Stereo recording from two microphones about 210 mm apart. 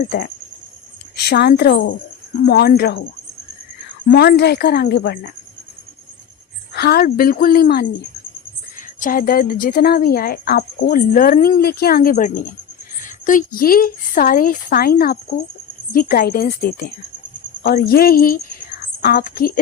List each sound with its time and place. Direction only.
1.2 s speech: 50° left (ahead or behind)
4.0 s speech: 45° left (ahead or behind)
6.7 s speech: 50° left (ahead or behind)
9.0 s a woman's voice: 40° left (ahead or behind)